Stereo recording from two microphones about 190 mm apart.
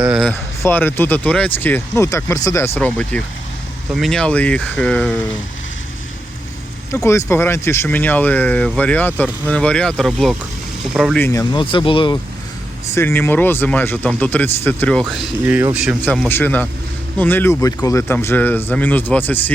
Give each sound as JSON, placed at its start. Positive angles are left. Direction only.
{"t": 0.1, "sound": "speech", "side_deg": 0}
{"t": 6.9, "sound": "speech", "side_deg": 15}
{"t": 11.2, "sound": "speech", "side_deg": 15}
{"t": 12.9, "sound": "speech", "side_deg": 15}
{"t": 15.0, "sound": "speech", "side_deg": -10}
{"t": 16.0, "sound": "speech", "side_deg": 5}